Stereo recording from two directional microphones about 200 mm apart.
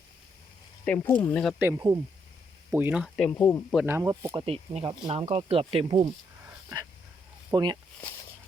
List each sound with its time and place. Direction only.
0.9 s speech: 10° left (ahead or behind)
1.5 s speech: 15° right (ahead or behind)
3.0 s speech: 5° left (ahead or behind)
3.8 s speech: 15° right (ahead or behind)
4.4 s speech: 30° right (ahead or behind)
7.5 s speech: 20° right (ahead or behind)